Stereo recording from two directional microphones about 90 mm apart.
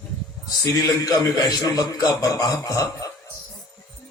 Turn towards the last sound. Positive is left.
turn(degrees=40)  # may be behind; listen again after turning